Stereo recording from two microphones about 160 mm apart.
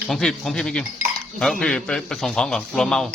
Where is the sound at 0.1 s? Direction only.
5° left (ahead or behind).